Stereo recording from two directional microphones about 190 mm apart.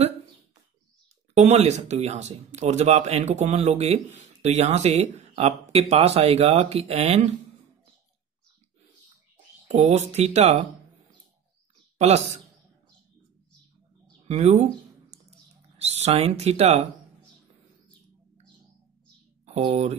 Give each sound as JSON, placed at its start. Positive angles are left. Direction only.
{"t": 1.3, "sound": "speech", "side_deg": -35}
{"t": 9.7, "sound": "speech", "side_deg": -35}
{"t": 12.0, "sound": "speech", "side_deg": -35}
{"t": 14.2, "sound": "a sound", "side_deg": -35}
{"t": 15.8, "sound": "speech", "side_deg": -35}
{"t": 19.4, "sound": "speech", "side_deg": -30}